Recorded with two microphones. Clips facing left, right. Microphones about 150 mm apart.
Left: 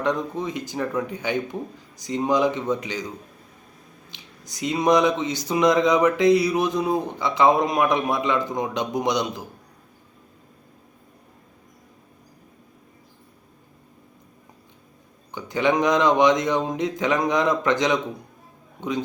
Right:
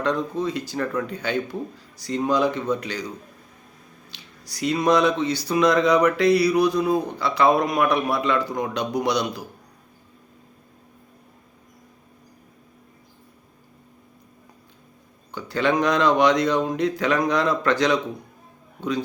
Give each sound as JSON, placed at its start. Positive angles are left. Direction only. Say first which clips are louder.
{"t": 0.0, "sound": "a man's voice", "louder": "right 1 dB", "side_deg": 20}
{"t": 4.1, "sound": "speech", "louder": "even", "side_deg": 20}
{"t": 15.3, "sound": "a man's voice", "louder": "left 1 dB", "side_deg": 20}